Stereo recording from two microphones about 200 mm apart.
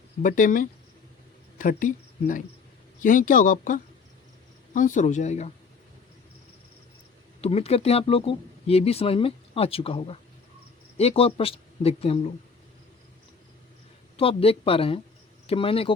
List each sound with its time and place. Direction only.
0.2 s speech: 40° left (ahead or behind)
7.4 s speech: 30° left (ahead or behind)
14.2 s speech: 30° left (ahead or behind)